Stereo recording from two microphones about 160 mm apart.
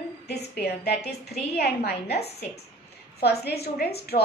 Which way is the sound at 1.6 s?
80° left.